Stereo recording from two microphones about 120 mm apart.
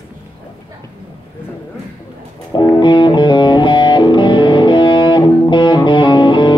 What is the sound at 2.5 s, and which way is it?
Music, 35° left (ahead or behind).